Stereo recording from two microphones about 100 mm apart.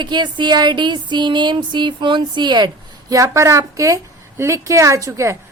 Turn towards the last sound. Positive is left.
turn(degrees=-30)  # may be behind; listen again after turning